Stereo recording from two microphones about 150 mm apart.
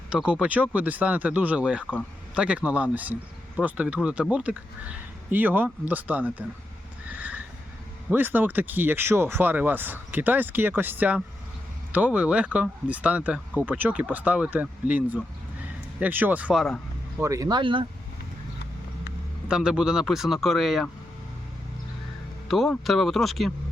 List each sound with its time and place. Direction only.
0.3 s speech: 10° right (ahead or behind)
7.2 s vehicle: 10° right (ahead or behind)
8.1 s speech: 10° right (ahead or behind)
17.2 s speech: 20° right (ahead or behind)
19.5 s speech: 5° right (ahead or behind)
22.4 s speech: centre (ahead or behind)